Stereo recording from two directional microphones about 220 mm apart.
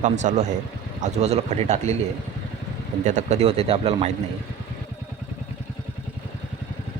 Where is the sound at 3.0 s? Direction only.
35° right (ahead or behind).